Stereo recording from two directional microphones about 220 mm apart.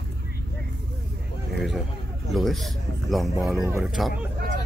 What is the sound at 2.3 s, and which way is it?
Speech, centre (ahead or behind).